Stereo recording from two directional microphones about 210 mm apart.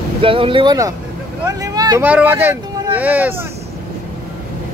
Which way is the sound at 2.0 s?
10° right (ahead or behind).